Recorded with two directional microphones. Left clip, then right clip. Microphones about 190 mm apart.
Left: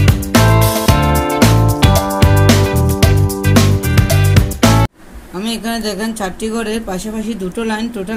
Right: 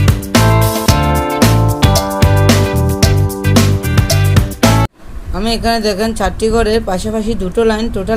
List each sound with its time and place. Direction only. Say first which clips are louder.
0.3 s music: even; centre (ahead or behind)
5.4 s speech: right 6 dB; 35° right (ahead or behind)